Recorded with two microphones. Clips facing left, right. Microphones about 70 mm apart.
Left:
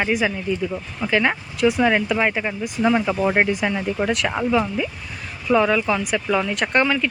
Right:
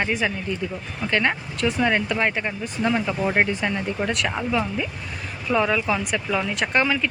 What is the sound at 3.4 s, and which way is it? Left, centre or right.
Speech, centre.